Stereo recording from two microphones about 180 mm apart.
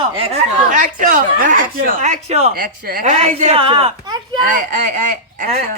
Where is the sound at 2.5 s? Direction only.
55° right (ahead or behind).